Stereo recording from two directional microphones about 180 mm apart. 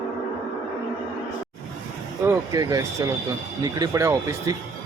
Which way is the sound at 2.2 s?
15° right (ahead or behind).